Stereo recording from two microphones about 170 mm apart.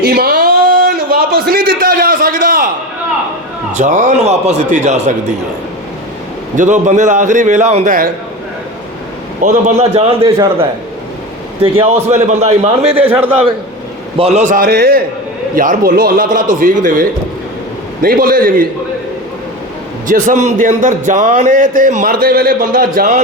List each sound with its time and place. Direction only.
0.0 s a sound: 65° right (ahead or behind)
3.7 s a man's voice: 45° right (ahead or behind)
6.6 s a man's voice: 45° right (ahead or behind)
9.4 s a man's voice: 45° right (ahead or behind)
10.2 s a man's voice: 20° right (ahead or behind)
11.6 s a man's voice: 35° right (ahead or behind)
13.0 s a man's voice: 10° right (ahead or behind)
14.2 s a man's voice: 40° right (ahead or behind); by 15.0 s 65° right (ahead or behind)
15.5 s a man's voice: 50° right (ahead or behind)
20.1 s a man's voice: 50° right (ahead or behind)